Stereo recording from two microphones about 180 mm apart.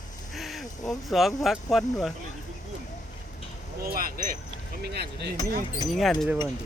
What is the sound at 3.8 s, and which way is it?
Speech, 55° right (ahead or behind).